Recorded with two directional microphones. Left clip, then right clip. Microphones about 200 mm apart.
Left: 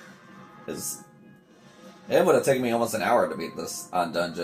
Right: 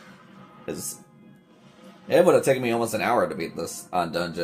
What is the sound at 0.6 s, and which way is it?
Speech, 55° right (ahead or behind).